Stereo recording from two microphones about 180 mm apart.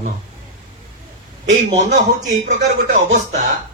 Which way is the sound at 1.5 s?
40° right (ahead or behind).